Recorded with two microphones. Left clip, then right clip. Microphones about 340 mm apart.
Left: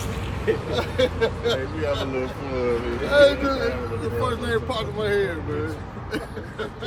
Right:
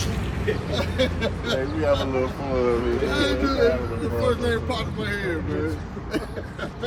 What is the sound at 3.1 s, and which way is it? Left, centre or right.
Speech, centre.